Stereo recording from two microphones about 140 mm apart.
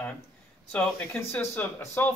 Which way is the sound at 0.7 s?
10° left (ahead or behind).